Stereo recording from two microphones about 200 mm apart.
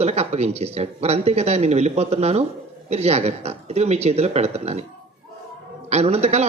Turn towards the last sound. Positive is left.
turn(degrees=-30)  # may be behind; listen again after turning